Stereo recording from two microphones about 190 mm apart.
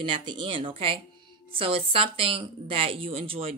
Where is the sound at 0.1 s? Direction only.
25° right (ahead or behind).